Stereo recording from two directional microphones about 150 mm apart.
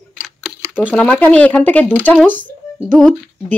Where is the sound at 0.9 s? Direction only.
10° left (ahead or behind).